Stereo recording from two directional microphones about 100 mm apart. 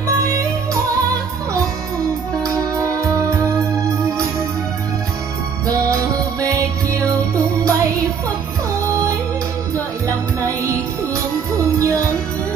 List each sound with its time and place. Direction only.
2.4 s music: 35° right (ahead or behind)
6.4 s music: 30° right (ahead or behind)
11.5 s music: 30° right (ahead or behind)